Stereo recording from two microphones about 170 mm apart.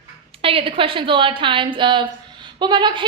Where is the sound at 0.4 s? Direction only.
30° right (ahead or behind).